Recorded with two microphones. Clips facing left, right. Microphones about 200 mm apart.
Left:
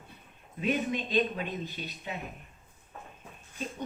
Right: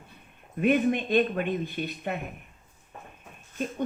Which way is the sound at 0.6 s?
55° right (ahead or behind).